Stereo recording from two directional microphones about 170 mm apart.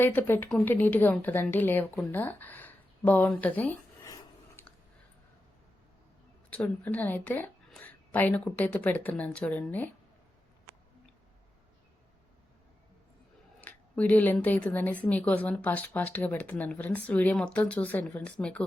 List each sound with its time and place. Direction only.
0.0 s a woman's voice: 10° left (ahead or behind)
4.0 s a sound: 20° left (ahead or behind)
6.5 s a woman's voice: 10° left (ahead or behind)
13.6 s a woman's voice: 10° left (ahead or behind)